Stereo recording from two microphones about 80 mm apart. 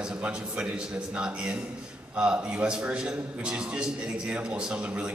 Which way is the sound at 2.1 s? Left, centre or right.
Centre.